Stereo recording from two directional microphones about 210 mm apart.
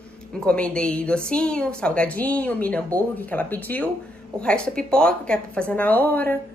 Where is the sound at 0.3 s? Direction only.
5° left (ahead or behind).